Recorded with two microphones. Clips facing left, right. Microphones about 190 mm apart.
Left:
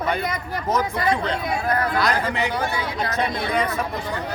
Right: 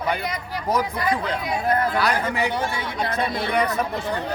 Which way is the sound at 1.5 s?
25° right (ahead or behind).